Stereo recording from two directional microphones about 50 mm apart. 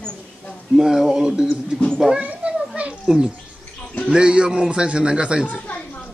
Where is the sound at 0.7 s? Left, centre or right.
Centre.